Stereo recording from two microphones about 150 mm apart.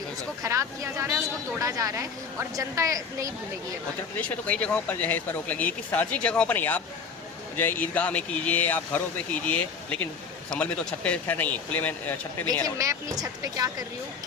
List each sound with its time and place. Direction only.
0.4 s a woman's voice: 20° right (ahead or behind)
4.2 s speech: 10° left (ahead or behind)
12.6 s a woman's voice: 20° right (ahead or behind)